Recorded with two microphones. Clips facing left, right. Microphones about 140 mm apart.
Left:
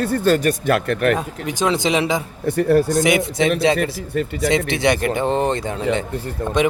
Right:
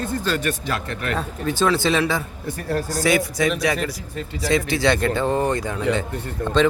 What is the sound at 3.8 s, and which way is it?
Speech, 60° left (ahead or behind).